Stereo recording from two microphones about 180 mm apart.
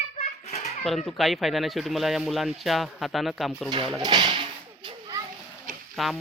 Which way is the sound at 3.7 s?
25° right (ahead or behind).